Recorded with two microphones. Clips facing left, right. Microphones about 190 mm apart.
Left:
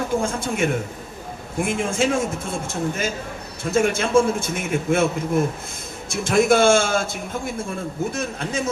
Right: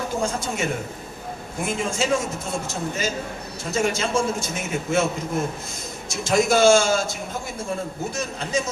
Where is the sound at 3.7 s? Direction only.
55° left (ahead or behind).